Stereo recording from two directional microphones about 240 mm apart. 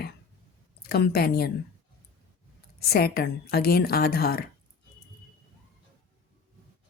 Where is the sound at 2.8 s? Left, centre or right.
Left.